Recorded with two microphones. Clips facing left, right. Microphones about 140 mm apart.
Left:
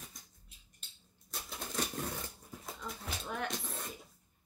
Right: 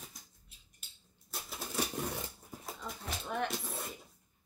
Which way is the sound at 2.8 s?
Centre (ahead or behind).